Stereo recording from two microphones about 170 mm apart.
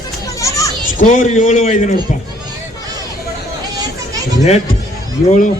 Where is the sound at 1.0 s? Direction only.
50° left (ahead or behind).